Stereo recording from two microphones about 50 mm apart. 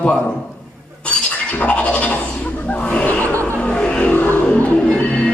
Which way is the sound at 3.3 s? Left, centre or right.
Right.